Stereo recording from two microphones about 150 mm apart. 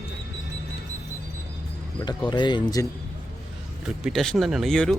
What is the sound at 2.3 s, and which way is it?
Speech, 30° left (ahead or behind).